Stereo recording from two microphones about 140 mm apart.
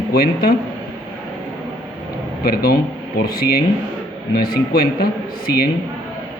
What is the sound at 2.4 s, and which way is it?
A man's voice, 90° left.